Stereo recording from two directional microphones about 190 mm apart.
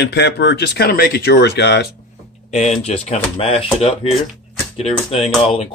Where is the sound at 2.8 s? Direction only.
35° left (ahead or behind).